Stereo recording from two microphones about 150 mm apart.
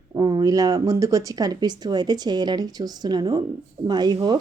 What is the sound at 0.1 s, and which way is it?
Speech, 25° right (ahead or behind).